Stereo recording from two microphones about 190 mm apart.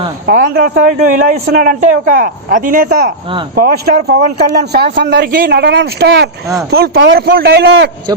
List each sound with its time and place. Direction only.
0.3 s a man's voice: 50° right (ahead or behind)